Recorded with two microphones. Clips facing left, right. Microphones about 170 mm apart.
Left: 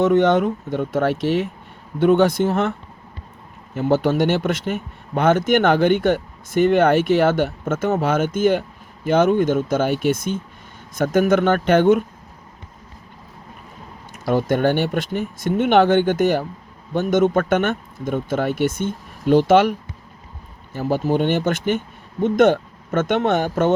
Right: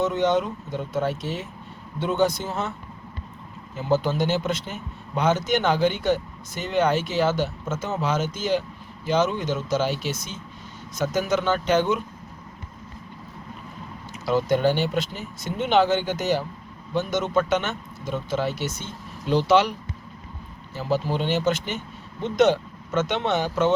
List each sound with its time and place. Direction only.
0.0 s a man's voice: 55° left (ahead or behind)
3.8 s a man's voice: 55° left (ahead or behind)
14.1 s speech: 50° left (ahead or behind)
20.7 s speech: 50° left (ahead or behind)